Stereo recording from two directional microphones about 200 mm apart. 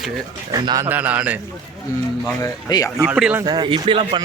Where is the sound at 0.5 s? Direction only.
20° right (ahead or behind).